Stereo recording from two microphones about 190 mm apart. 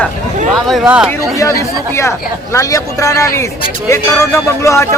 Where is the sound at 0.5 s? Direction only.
Centre (ahead or behind).